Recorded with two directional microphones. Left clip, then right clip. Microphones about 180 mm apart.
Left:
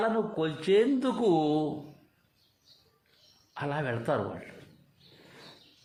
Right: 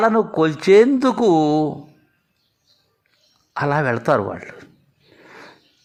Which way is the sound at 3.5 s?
30° right (ahead or behind).